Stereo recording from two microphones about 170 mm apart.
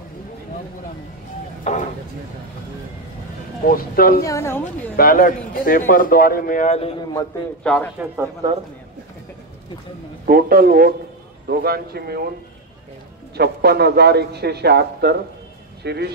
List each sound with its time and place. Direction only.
1.6 s a sound: 45° left (ahead or behind)
3.6 s a man's voice: 60° left (ahead or behind)
4.2 s a woman's voice: 15° left (ahead or behind)
4.9 s a man's voice: 55° left (ahead or behind)
7.6 s speech: 5° left (ahead or behind)
10.2 s a man's voice: 60° right (ahead or behind)
13.4 s a man's voice: 70° right (ahead or behind)